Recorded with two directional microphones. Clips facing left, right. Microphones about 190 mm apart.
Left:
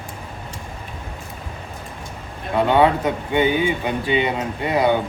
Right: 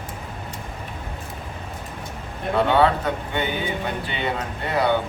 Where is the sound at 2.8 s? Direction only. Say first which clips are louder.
Left 2 dB; 15° left (ahead or behind).